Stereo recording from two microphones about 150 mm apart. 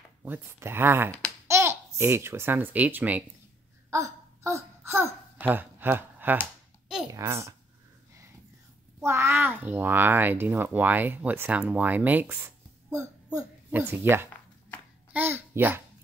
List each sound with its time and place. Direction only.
0.2 s speech: 15° right (ahead or behind)
3.9 s a sound: 20° right (ahead or behind)
5.4 s speech: 15° right (ahead or behind)
6.4 s a sound: 5° right (ahead or behind)
7.1 s a child's voice: 20° right (ahead or behind)
9.0 s a child's voice: 20° right (ahead or behind)
15.1 s babbling: 15° right (ahead or behind)